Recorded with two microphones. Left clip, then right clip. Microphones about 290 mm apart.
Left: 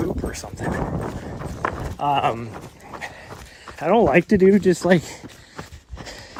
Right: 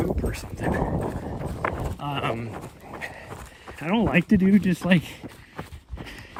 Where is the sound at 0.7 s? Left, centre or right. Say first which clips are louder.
Right 1 dB; right.